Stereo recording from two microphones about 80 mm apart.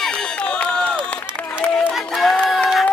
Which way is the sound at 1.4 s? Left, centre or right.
Left.